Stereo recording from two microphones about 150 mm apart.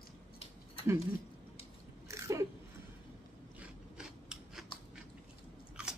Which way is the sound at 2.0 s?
20° right (ahead or behind).